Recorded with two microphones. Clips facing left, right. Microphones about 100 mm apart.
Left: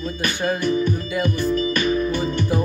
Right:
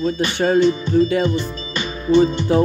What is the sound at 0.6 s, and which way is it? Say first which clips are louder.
Music: right 7 dB; 20° right (ahead or behind).